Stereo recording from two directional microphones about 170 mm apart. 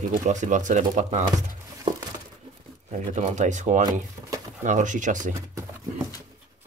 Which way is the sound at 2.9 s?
45° right (ahead or behind).